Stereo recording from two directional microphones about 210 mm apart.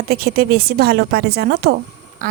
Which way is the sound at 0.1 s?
45° right (ahead or behind).